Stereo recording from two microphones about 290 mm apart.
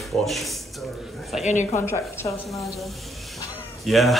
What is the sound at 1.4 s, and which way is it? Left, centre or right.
Speech, left.